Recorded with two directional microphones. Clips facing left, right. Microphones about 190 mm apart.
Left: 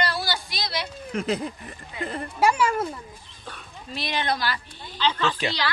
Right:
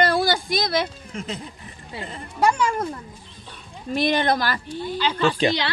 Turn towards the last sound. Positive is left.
turn(degrees=-10)  # may be behind; listen again after turning